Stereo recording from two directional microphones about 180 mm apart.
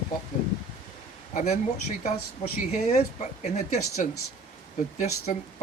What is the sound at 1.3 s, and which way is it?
Speech, 45° left (ahead or behind).